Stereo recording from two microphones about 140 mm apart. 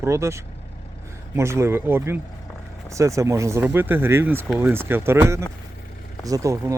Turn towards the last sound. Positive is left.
turn(degrees=-25)  # may be behind; listen again after turning